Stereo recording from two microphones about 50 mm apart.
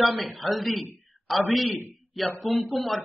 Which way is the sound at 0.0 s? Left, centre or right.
Centre.